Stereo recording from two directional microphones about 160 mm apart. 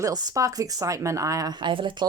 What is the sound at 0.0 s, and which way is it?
Speech, 25° right (ahead or behind).